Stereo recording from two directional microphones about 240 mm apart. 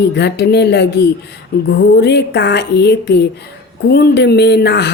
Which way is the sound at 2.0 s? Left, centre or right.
Left.